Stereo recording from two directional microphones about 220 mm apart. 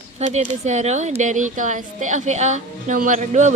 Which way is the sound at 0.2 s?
30° right (ahead or behind).